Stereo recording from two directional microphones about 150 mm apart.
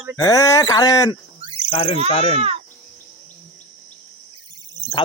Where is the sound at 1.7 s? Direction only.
40° left (ahead or behind).